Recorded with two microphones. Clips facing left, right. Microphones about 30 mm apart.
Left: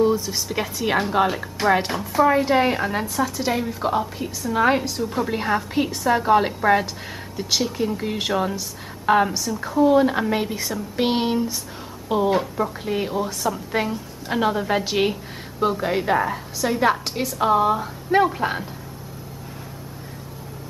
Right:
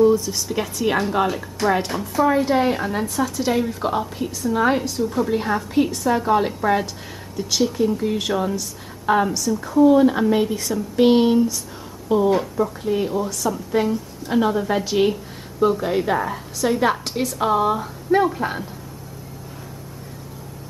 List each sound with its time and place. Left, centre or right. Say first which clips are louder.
0.0 s a woman's voice: right 3 dB; centre
4.6 s a woman's voice: left 1 dB; centre
18.1 s a woman's voice: even; centre